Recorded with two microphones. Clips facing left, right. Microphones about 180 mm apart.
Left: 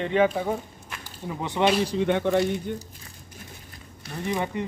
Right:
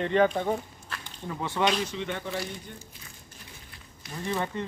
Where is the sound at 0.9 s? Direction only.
15° left (ahead or behind).